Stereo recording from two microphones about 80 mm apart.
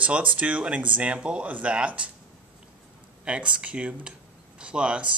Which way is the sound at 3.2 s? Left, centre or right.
Centre.